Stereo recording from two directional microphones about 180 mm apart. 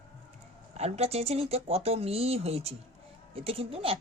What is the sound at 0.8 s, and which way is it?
Speech, 35° right (ahead or behind).